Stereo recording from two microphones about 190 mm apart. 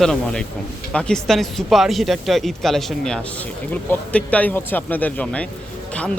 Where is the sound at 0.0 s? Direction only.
Centre (ahead or behind).